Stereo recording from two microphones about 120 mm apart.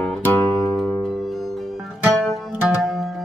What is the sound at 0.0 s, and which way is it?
Music, 15° left (ahead or behind).